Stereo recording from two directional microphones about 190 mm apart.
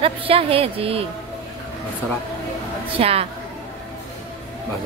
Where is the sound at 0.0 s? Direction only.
30° right (ahead or behind).